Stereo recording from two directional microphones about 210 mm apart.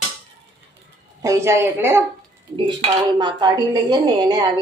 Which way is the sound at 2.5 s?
20° right (ahead or behind).